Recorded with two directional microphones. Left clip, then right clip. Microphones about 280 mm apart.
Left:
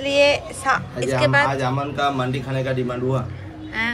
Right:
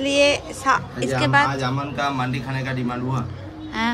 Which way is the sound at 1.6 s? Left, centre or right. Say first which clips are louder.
Left 2 dB; centre.